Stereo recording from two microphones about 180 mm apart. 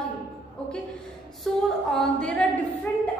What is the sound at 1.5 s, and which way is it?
Speech, centre (ahead or behind).